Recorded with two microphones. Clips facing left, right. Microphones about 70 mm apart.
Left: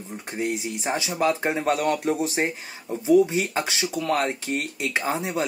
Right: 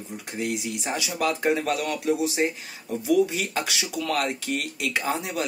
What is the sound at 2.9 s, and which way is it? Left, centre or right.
Speech, left.